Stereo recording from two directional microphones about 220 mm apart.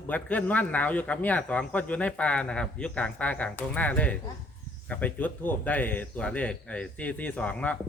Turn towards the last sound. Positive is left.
turn(degrees=5)  # may be behind; listen again after turning